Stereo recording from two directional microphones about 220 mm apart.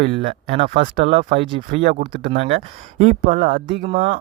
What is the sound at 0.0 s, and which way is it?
Speech, 30° right (ahead or behind).